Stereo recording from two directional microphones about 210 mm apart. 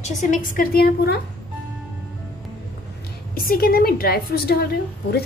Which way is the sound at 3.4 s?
45° left (ahead or behind).